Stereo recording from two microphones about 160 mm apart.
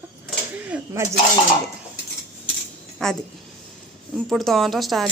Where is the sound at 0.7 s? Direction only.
15° right (ahead or behind).